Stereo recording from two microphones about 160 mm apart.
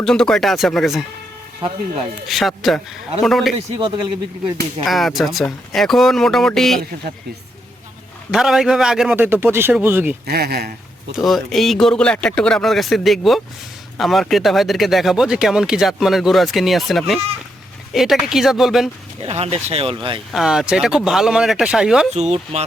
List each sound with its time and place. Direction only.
0.0 s speech: 5° left (ahead or behind)
1.6 s speech: 30° right (ahead or behind)
2.2 s speech: centre (ahead or behind)
4.9 s speech: centre (ahead or behind)
8.3 s speech: 5° right (ahead or behind)
10.2 s speech: 80° right
11.2 s speech: centre (ahead or behind)
19.2 s speech: 40° right (ahead or behind)
20.3 s speech: 5° right (ahead or behind)
22.1 s speech: 40° right (ahead or behind)